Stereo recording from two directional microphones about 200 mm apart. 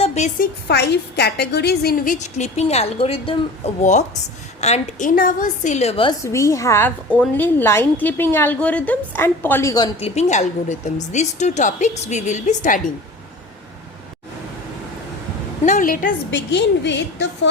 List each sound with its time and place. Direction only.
0.0 s a woman's voice: 35° left (ahead or behind)
0.7 s a woman's voice: 55° left (ahead or behind)
2.1 s a woman's voice: 35° left (ahead or behind)
6.2 s a woman's voice: 15° left (ahead or behind); by 12.8 s 40° left (ahead or behind)
15.6 s a woman's voice: 40° left (ahead or behind)
16.3 s a woman's voice: 60° left (ahead or behind)